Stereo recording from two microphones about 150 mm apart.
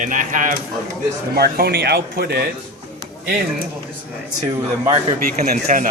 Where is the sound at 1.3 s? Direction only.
90° right.